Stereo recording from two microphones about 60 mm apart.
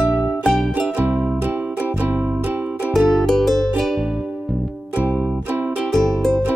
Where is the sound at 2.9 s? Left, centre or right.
Centre.